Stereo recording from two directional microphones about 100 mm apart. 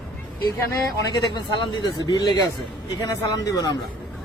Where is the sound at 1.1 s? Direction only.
45° left (ahead or behind).